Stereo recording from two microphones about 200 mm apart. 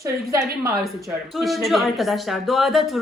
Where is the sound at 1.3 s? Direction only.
Centre (ahead or behind).